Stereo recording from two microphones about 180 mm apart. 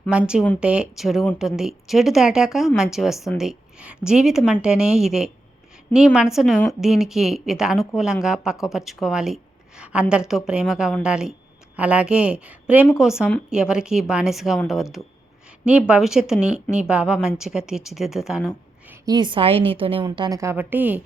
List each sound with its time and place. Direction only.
0.1 s speech: 5° right (ahead or behind)
6.3 s a woman's voice: centre (ahead or behind)
19.0 s a woman's voice: 25° right (ahead or behind); by 21.0 s 10° right (ahead or behind)